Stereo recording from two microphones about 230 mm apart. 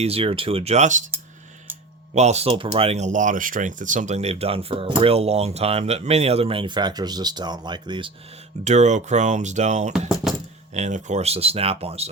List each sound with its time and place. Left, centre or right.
0.0 s speech: right
2.1 s speech: right
8.6 s speech: right
10.2 s coin: centre
10.8 s speech: right